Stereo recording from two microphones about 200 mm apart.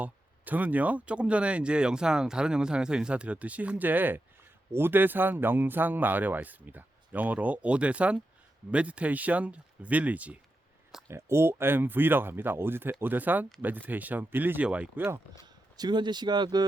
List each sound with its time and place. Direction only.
0.0 s speech: 10° right (ahead or behind)
15.4 s speech: 20° right (ahead or behind)